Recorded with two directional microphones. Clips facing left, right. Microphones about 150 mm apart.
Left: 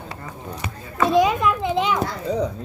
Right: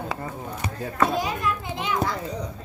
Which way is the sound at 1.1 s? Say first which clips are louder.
Left 8 dB; 90° left.